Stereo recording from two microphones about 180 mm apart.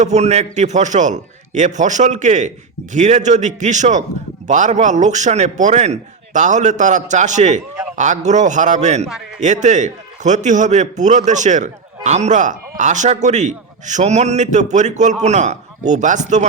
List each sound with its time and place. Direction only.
0.0 s a man's voice: 40° right (ahead or behind)